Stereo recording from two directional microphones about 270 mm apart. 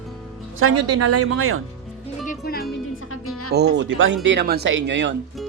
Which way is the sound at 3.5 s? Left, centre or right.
Right.